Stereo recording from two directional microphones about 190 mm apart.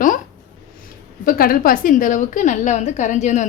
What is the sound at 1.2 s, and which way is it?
A woman's voice, 50° left (ahead or behind).